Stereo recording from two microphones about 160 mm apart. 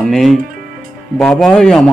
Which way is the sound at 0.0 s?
Centre (ahead or behind).